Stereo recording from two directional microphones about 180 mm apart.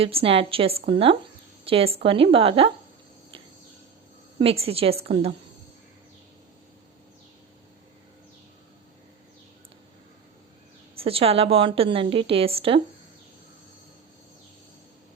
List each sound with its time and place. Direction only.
0.0 s a woman's voice: 30° right (ahead or behind)
4.4 s a woman's voice: 30° right (ahead or behind)
10.9 s a woman's voice: 30° right (ahead or behind)